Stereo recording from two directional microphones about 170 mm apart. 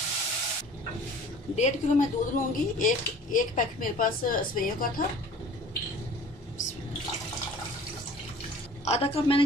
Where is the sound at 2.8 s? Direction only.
50° left (ahead or behind).